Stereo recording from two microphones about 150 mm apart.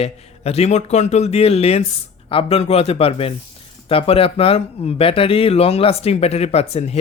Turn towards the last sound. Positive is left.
turn(degrees=45)  # may be behind; listen again after turning